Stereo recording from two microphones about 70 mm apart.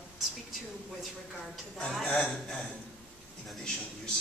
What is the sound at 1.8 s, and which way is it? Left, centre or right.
Speech, centre.